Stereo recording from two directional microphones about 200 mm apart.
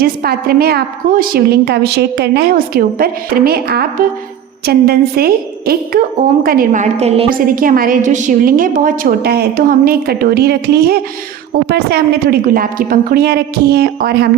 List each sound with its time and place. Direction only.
0.0 s a woman's voice: 50° right (ahead or behind); by 7.3 s 30° right (ahead or behind)
7.3 s a woman's voice: 45° right (ahead or behind)